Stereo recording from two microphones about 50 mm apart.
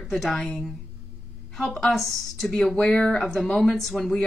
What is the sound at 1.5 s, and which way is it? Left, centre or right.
A woman's voice, centre.